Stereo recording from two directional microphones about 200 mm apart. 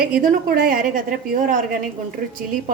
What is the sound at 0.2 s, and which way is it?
A woman's voice, 45° right (ahead or behind).